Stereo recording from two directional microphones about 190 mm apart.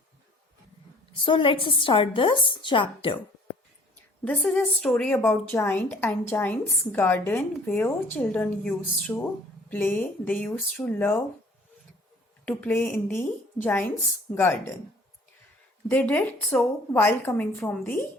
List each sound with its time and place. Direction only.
1.1 s speech: 25° left (ahead or behind)
4.2 s a woman's voice: 5° left (ahead or behind)
12.5 s a woman's voice: 10° left (ahead or behind)
15.9 s a woman's voice: 10° left (ahead or behind)